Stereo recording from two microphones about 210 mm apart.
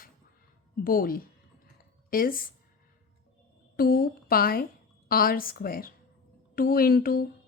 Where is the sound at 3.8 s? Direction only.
45° left (ahead or behind).